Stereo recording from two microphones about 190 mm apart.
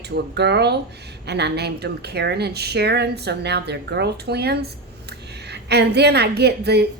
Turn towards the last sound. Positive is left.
turn(degrees=-60)  # may be behind; listen again after turning